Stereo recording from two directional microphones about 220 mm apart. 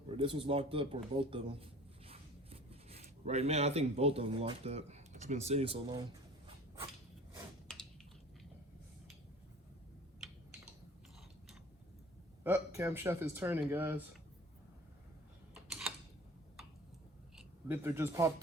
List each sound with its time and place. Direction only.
0.1 s speech: 25° right (ahead or behind)
12.4 s speech: 10° right (ahead or behind)
15.5 s typing: centre (ahead or behind)
17.3 s a sound: 10° right (ahead or behind)